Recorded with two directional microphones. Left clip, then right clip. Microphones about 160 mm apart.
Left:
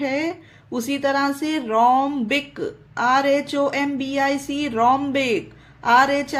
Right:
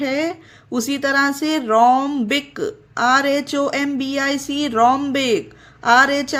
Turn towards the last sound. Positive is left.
turn(degrees=-35)  # may be behind; listen again after turning